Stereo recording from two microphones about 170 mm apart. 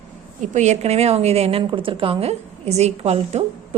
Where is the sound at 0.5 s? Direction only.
40° right (ahead or behind).